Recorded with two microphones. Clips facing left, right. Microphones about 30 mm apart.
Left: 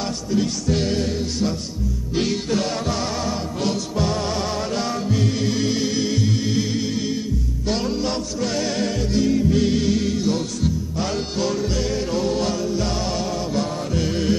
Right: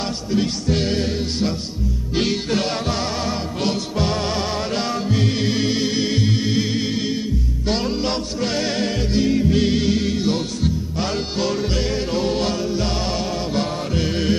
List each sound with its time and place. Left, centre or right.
0.3 s music: right